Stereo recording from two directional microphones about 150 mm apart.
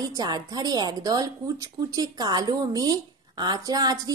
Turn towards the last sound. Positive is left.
turn(degrees=-25)  # may be behind; listen again after turning